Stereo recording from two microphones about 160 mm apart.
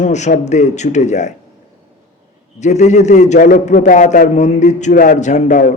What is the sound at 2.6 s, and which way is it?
A man's voice, 45° left (ahead or behind).